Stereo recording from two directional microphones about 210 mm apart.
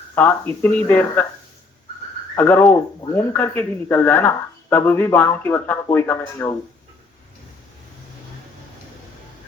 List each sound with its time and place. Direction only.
0.2 s speech: 10° left (ahead or behind)
2.3 s speech: 10° left (ahead or behind)